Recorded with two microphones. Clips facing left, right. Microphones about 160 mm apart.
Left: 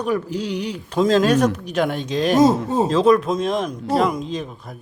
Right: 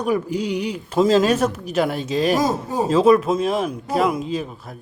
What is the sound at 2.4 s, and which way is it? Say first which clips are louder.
Speech: left 6 dB; 25° left (ahead or behind).